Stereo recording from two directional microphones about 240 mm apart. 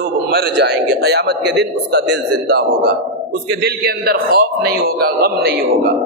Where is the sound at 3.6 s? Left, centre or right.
Right.